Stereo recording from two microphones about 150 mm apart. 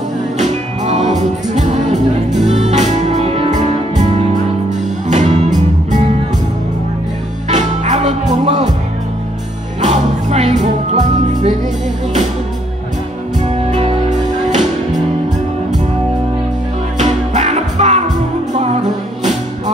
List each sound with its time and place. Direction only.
0.4 s music: 50° right (ahead or behind)
7.4 s music: 50° right (ahead or behind)
9.8 s music: 50° right (ahead or behind)
13.4 s music: 45° right (ahead or behind)
17.0 s music: 50° right (ahead or behind)